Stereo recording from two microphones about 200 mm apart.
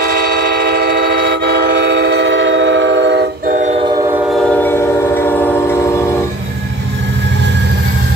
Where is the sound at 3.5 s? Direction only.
35° right (ahead or behind).